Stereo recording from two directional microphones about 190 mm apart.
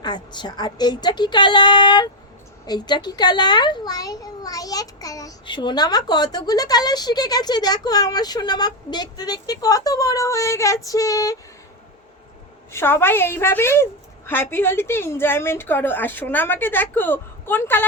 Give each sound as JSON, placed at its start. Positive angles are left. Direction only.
{"t": 0.0, "sound": "a child's voice", "side_deg": 25}
{"t": 12.7, "sound": "a woman's voice", "side_deg": 10}